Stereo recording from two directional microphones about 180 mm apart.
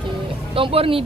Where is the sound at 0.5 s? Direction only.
30° right (ahead or behind).